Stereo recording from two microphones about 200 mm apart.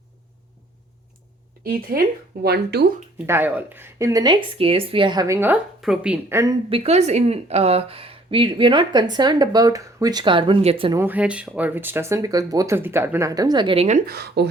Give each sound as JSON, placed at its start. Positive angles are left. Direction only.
{"t": 1.6, "sound": "speech", "side_deg": -45}
{"t": 3.2, "sound": "a woman's voice", "side_deg": -10}
{"t": 6.7, "sound": "speech", "side_deg": -30}
{"t": 10.9, "sound": "a woman's voice", "side_deg": -10}
{"t": 14.1, "sound": "speech", "side_deg": -55}